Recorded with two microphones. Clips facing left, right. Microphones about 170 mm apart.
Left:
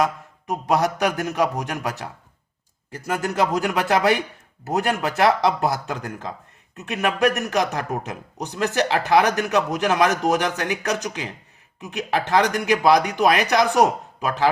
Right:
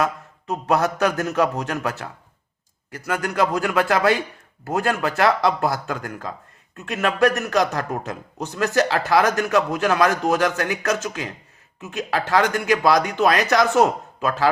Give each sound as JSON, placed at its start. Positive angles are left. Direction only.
{"t": 0.0, "sound": "a man's voice", "side_deg": 15}
{"t": 2.9, "sound": "a man's voice", "side_deg": 25}